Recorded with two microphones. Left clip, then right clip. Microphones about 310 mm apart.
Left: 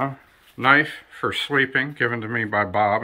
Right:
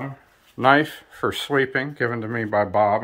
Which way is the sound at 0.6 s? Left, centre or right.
Right.